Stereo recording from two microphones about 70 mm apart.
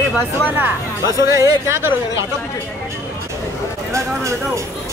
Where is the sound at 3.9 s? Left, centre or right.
Right.